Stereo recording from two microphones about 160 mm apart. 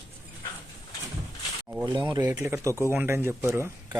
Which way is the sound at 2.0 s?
15° right (ahead or behind).